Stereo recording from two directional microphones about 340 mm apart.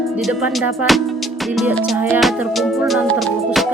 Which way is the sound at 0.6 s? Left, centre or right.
Centre.